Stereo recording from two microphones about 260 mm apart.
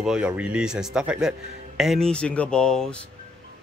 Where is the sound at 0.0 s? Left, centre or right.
Centre.